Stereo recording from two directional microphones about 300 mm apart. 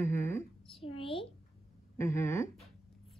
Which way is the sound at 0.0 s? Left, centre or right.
Centre.